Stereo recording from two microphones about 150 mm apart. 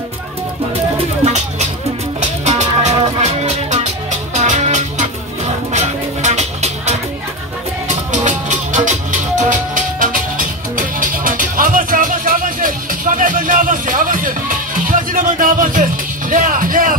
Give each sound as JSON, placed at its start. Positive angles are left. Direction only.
{"t": 1.2, "sound": "speech", "side_deg": -50}
{"t": 2.4, "sound": "music", "side_deg": -50}